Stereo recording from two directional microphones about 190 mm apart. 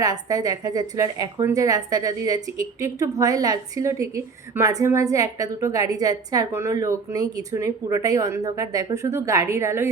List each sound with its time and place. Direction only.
0.0 s a woman's voice: 20° right (ahead or behind)